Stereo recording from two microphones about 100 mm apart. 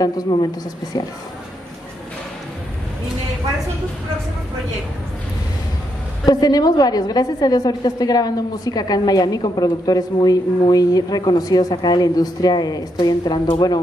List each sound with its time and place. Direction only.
0.3 s a woman's voice: 50° left (ahead or behind)
6.2 s a woman's voice: 40° left (ahead or behind)